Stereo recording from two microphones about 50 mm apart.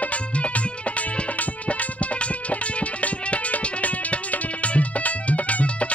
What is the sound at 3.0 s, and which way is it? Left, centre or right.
Music, left.